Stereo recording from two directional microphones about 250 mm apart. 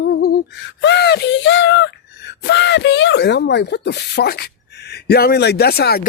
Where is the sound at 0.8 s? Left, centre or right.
Left.